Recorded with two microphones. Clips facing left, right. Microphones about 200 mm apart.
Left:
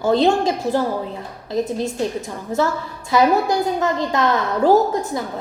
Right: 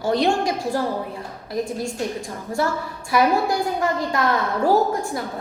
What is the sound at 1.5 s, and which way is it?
A woman's voice, 20° left (ahead or behind).